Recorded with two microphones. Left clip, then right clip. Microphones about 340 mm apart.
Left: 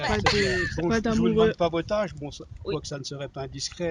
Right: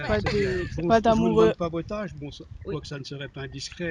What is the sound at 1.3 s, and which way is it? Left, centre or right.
Speech, centre.